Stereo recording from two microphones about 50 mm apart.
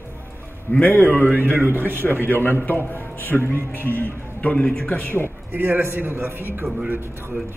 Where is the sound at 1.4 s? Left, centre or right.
Right.